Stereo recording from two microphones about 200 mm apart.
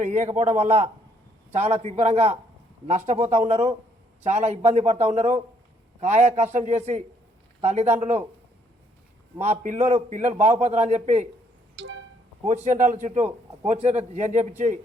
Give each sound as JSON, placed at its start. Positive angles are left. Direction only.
{"t": 0.0, "sound": "a man's voice", "side_deg": -35}
{"t": 9.4, "sound": "a man's voice", "side_deg": -35}
{"t": 11.8, "sound": "music", "side_deg": -65}
{"t": 12.6, "sound": "a man's voice", "side_deg": -35}